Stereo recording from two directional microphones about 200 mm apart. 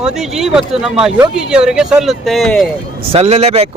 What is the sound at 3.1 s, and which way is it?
Speech, 30° right (ahead or behind).